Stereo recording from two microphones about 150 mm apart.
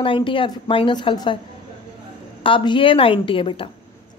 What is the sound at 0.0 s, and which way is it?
A woman's voice, 35° left (ahead or behind).